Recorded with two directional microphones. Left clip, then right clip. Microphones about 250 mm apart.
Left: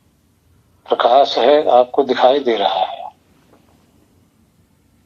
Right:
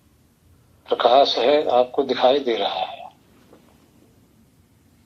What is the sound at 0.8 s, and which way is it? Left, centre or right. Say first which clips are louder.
Speech: left 3 dB; left.